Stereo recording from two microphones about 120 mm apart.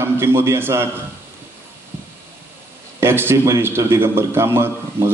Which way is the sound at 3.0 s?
20° right (ahead or behind).